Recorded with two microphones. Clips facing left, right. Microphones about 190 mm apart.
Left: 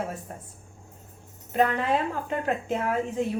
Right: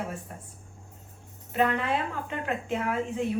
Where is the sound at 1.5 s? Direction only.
40° left (ahead or behind).